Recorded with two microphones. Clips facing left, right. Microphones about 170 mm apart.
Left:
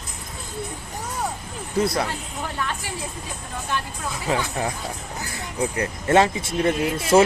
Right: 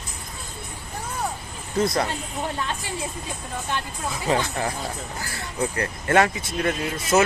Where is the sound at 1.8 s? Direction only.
5° left (ahead or behind).